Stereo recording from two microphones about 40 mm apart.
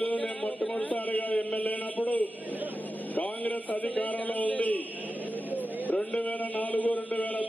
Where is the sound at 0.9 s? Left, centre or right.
Left.